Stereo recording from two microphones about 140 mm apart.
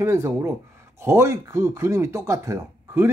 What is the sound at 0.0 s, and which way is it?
Speech, 20° right (ahead or behind).